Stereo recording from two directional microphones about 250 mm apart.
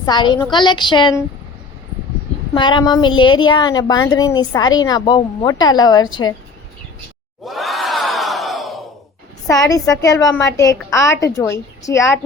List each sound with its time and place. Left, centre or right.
0.0 s a woman's voice: centre
2.6 s a woman's voice: centre
7.4 s crowd: centre
9.5 s a woman's voice: centre